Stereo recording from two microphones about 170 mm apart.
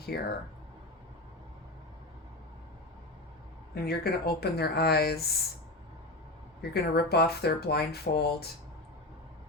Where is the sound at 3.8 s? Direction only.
70° left (ahead or behind).